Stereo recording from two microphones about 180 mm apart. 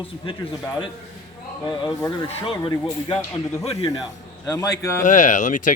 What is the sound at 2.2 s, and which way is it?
Speech, 30° left (ahead or behind).